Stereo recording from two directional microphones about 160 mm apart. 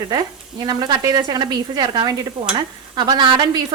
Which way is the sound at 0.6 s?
25° right (ahead or behind).